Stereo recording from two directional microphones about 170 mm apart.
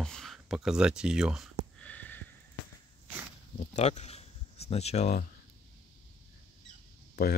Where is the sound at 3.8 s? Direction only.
40° left (ahead or behind).